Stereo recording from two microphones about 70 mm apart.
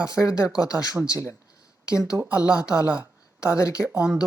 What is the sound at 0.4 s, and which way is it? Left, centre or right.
Speech, left.